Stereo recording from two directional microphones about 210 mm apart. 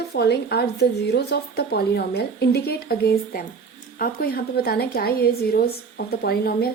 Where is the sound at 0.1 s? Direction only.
50° left (ahead or behind).